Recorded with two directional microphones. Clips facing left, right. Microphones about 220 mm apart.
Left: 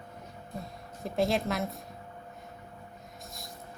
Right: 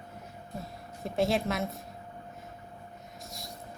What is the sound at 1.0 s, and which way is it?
Speech, centre (ahead or behind).